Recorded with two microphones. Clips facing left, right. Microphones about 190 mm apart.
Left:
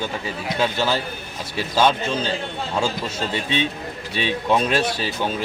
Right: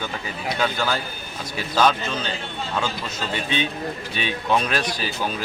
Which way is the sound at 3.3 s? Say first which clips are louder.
Even; 30° left (ahead or behind).